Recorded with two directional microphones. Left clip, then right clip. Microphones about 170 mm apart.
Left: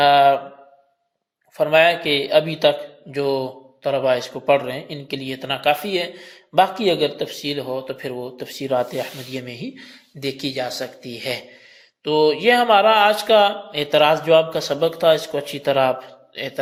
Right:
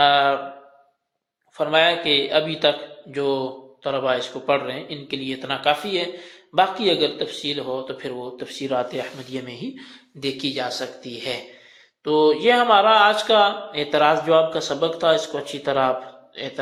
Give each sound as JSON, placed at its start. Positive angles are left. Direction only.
{"t": 0.0, "sound": "a sound", "side_deg": 35}
{"t": 1.5, "sound": "speech", "side_deg": 40}
{"t": 12.0, "sound": "speech", "side_deg": 30}